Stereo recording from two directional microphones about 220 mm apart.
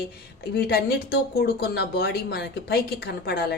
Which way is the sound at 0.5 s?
45° left (ahead or behind).